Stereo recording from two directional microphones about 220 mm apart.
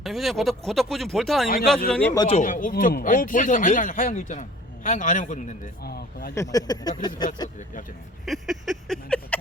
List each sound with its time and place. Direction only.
0.0 s speech: centre (ahead or behind)
2.2 s speech: 35° left (ahead or behind)
5.8 s speech: 45° left (ahead or behind)
6.3 s speech: 15° left (ahead or behind)
8.2 s a sound: centre (ahead or behind)